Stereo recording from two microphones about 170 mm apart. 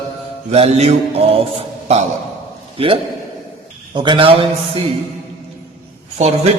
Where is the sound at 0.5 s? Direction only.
35° right (ahead or behind).